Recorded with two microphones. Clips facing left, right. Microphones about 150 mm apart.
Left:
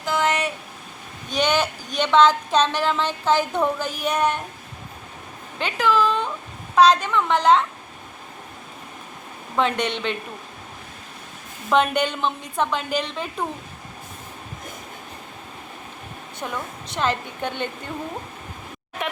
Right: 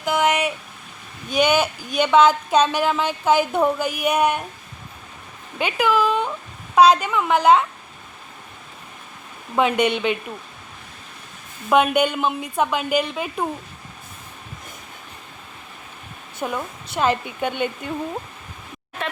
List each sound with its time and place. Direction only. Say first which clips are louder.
0.0 s a sound: right 3 dB; 15° right (ahead or behind)
1.3 s speech: right 3 dB; 10° right (ahead or behind)
5.5 s speech: right 1 dB; 10° right (ahead or behind)
9.6 s speech: right 4 dB; 10° right (ahead or behind)
11.7 s speech: right 3 dB; 10° right (ahead or behind)
16.4 s speech: right 4 dB; 15° right (ahead or behind)
19.0 s a sound: even; 15° left (ahead or behind)